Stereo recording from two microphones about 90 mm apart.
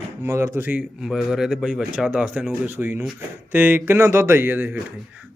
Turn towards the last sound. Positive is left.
turn(degrees=-20)  # may be behind; listen again after turning